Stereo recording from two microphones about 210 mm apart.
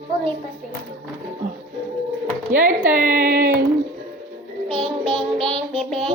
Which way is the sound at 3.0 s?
40° right (ahead or behind).